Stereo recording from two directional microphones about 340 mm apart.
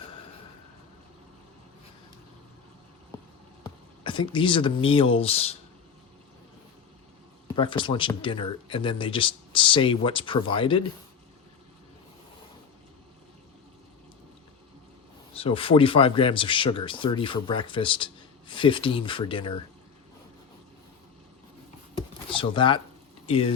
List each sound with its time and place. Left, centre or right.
3.6 s speech: centre
7.5 s speech: centre
15.4 s speech: centre
21.9 s a sound: centre
23.2 s speech: centre